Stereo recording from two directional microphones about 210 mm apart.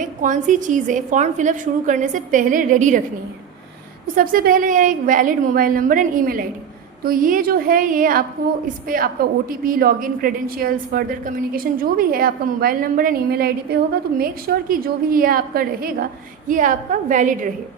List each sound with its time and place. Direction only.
0.0 s a woman's voice: 35° right (ahead or behind)
4.0 s a woman's voice: 40° right (ahead or behind)